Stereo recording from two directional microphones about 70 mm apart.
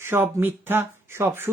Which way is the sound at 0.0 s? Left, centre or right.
Right.